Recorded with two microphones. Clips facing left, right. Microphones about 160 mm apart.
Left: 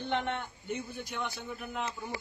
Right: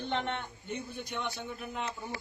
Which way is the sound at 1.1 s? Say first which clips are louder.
Right 2 dB; centre (ahead or behind).